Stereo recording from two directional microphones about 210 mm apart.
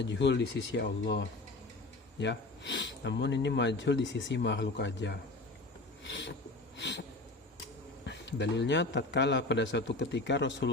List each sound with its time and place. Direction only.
0.0 s speech: 55° left (ahead or behind)
6.7 s a sound: 55° left (ahead or behind)
8.0 s speech: 55° left (ahead or behind)